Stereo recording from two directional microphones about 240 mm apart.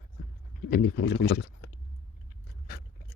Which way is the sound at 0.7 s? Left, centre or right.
Left.